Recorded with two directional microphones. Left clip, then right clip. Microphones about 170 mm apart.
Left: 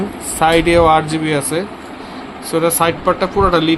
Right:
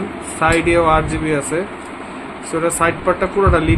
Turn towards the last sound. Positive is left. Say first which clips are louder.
# left 2 dB
turn(degrees=40)  # may be behind; listen again after turning